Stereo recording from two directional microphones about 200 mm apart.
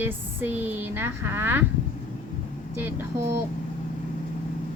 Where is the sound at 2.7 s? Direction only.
10° right (ahead or behind).